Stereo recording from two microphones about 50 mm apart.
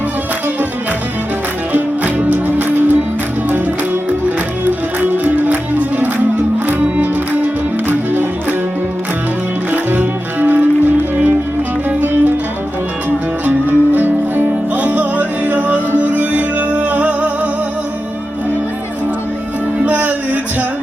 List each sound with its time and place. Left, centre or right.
1.7 s music: right
4.9 s music: right
9.7 s music: right
19.8 s music: right